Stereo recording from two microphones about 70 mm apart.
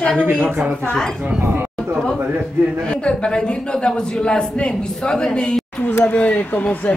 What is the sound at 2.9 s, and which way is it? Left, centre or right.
A man's voice, centre.